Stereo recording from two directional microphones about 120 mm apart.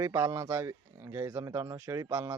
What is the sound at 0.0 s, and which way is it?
Speech, 25° right (ahead or behind).